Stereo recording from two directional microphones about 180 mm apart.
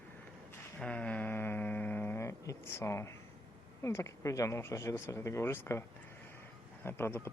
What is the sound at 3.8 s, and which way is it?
Speech, 15° left (ahead or behind).